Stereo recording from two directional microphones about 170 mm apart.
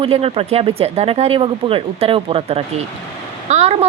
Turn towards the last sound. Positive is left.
turn(degrees=-40)  # may be behind; listen again after turning